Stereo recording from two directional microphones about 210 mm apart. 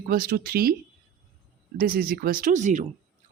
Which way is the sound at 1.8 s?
45° right (ahead or behind).